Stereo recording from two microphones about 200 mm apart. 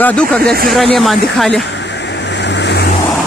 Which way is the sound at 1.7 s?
60° left (ahead or behind).